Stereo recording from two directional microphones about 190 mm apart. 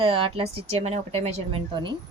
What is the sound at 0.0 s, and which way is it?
A woman's voice, 25° right (ahead or behind).